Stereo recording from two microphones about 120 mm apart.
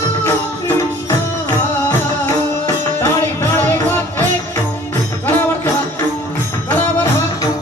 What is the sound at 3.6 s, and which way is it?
Music, 15° left (ahead or behind).